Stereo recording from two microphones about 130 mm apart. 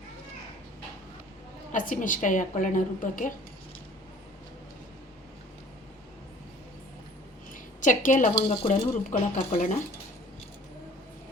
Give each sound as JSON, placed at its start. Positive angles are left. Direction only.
{"t": 1.7, "sound": "a woman's voice", "side_deg": 90}
{"t": 7.5, "sound": "a woman's voice", "side_deg": 85}